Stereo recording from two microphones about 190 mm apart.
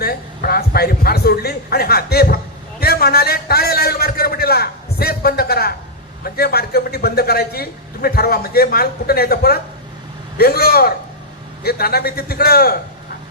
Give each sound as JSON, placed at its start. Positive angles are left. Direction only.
{"t": 0.0, "sound": "a man's voice", "side_deg": 55}
{"t": 2.8, "sound": "a sound", "side_deg": 55}
{"t": 6.2, "sound": "a man's voice", "side_deg": 55}